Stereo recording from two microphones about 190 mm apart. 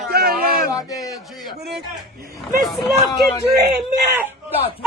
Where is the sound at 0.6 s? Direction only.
20° left (ahead or behind).